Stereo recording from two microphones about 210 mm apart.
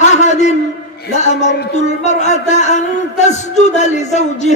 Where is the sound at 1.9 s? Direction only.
35° left (ahead or behind).